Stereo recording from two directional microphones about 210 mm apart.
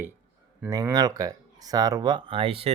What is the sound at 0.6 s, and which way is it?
Speech, 10° right (ahead or behind).